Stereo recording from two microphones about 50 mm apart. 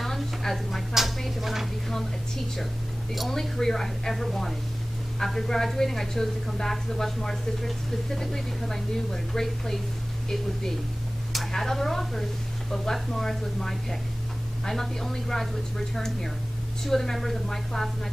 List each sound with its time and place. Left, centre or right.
0.0 s a sound: centre
0.9 s chopping: centre
3.2 s a woman's voice: centre
11.3 s a woman's voice: centre